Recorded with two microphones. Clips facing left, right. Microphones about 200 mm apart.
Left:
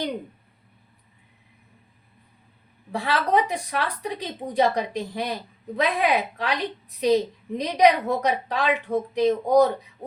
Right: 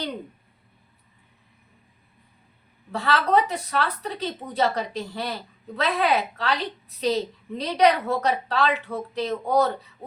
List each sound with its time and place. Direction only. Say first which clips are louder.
2.9 s a woman's voice: right 1 dB; 10° left (ahead or behind)